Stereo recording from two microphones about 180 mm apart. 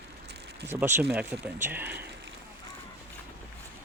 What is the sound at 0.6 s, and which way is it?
Speech, 10° right (ahead or behind).